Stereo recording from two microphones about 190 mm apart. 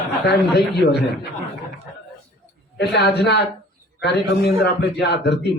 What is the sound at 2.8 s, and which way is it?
Speech, 65° left (ahead or behind).